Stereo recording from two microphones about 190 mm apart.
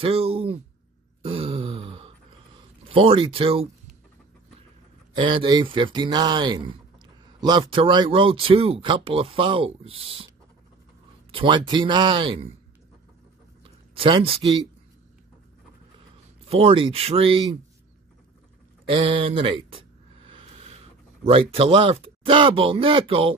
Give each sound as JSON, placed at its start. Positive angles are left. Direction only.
{"t": 0.0, "sound": "speech", "side_deg": -30}
{"t": 1.2, "sound": "a sound", "side_deg": -30}
{"t": 2.9, "sound": "speech", "side_deg": -30}
{"t": 5.2, "sound": "speech", "side_deg": -25}
{"t": 11.3, "sound": "speech", "side_deg": -25}
{"t": 13.9, "sound": "speech", "side_deg": -30}
{"t": 16.4, "sound": "speech", "side_deg": -30}
{"t": 18.9, "sound": "a sound", "side_deg": -25}
{"t": 21.3, "sound": "speech", "side_deg": -30}